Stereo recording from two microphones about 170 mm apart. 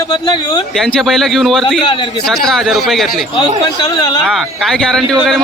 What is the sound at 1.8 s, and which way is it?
Speech, 30° left (ahead or behind).